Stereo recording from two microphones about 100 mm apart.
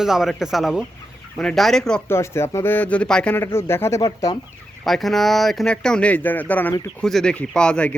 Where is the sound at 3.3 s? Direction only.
25° left (ahead or behind).